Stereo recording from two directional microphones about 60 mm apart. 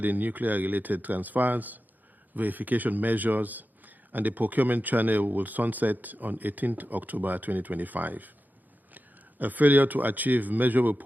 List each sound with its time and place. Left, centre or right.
0.0 s speech: right